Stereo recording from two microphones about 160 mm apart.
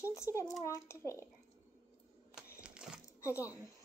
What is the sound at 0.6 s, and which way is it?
Speech, 15° left (ahead or behind).